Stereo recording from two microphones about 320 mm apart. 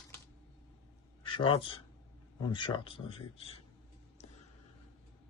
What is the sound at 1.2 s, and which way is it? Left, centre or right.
Speech, centre.